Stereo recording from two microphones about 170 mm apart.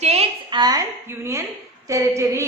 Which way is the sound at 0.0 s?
35° right (ahead or behind).